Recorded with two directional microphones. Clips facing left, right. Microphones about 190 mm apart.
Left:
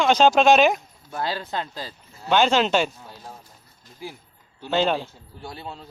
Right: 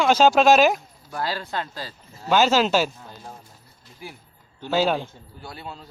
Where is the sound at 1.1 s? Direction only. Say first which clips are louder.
Even; 20° left (ahead or behind).